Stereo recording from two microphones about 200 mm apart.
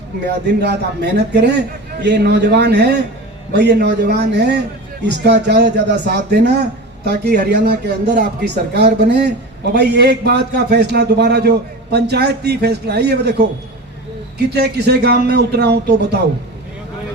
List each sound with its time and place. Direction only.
0.6 s a man's voice: 55° right (ahead or behind)